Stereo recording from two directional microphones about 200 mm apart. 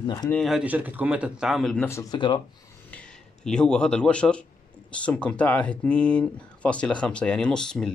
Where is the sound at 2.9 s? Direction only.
5° left (ahead or behind).